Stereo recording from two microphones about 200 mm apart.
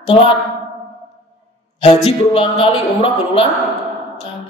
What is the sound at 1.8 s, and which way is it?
Speech, 30° left (ahead or behind).